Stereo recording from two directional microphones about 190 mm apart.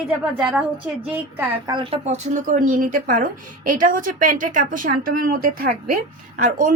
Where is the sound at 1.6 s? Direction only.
25° right (ahead or behind).